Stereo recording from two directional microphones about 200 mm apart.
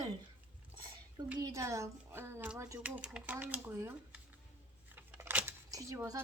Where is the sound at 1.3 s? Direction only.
15° right (ahead or behind).